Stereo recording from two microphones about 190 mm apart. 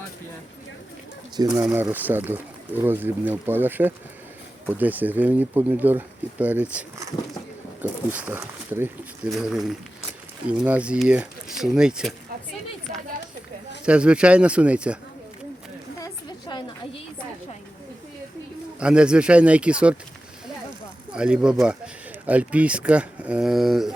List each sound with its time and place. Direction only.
1.4 s speech: 20° right (ahead or behind); by 12.1 s 5° right (ahead or behind)
13.8 s speech: 5° right (ahead or behind)
16.0 s a sound: 20° left (ahead or behind)
18.8 s speech: 5° right (ahead or behind)
21.1 s speech: 5° right (ahead or behind)